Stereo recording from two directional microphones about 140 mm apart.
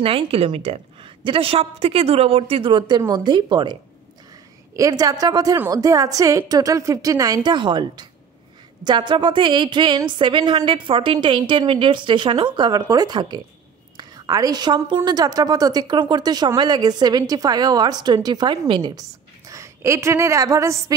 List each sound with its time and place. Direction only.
0.0 s a woman's voice: 40° right (ahead or behind)
4.7 s a woman's voice: 25° right (ahead or behind)